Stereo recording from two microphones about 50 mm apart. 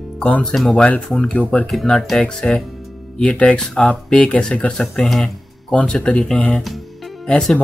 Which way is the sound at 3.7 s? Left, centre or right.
Centre.